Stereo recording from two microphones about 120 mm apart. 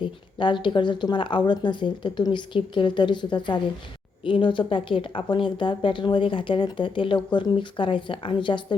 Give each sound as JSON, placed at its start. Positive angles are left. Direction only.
{"t": 0.0, "sound": "a woman's voice", "side_deg": 40}